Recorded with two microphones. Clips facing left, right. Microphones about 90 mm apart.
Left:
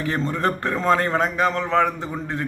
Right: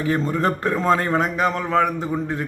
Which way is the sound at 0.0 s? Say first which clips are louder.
Right 2 dB; 15° right (ahead or behind).